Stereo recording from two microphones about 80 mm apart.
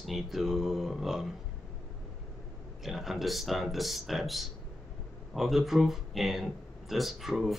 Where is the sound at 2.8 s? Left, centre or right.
Centre.